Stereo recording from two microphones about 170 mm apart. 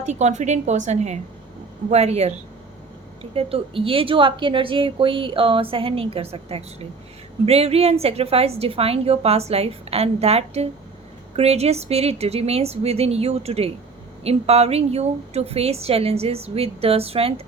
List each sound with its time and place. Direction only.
0.0 s a woman's voice: 40° right (ahead or behind)
3.3 s speech: 35° right (ahead or behind)